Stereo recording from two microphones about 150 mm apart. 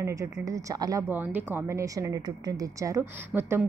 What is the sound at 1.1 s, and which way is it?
A woman's voice, 10° right (ahead or behind).